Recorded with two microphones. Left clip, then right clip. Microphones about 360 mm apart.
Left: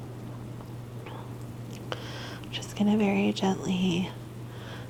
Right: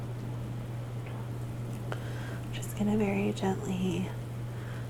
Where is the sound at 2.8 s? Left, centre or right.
Left.